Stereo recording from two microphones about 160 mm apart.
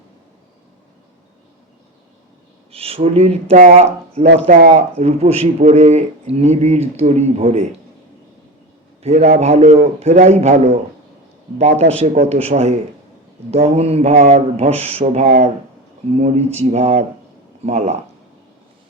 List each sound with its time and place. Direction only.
2.7 s a man's voice: 40° right (ahead or behind)
9.0 s a man's voice: 45° right (ahead or behind)
15.2 s speech: 60° right (ahead or behind)
16.1 s a man's voice: 40° right (ahead or behind)